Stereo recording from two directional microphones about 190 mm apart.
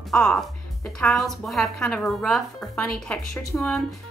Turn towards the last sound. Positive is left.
turn(degrees=0)  # may be behind; listen again after turning